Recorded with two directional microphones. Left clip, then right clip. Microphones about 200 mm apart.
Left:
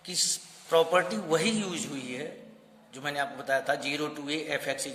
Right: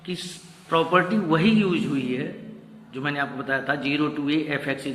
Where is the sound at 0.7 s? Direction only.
60° left (ahead or behind).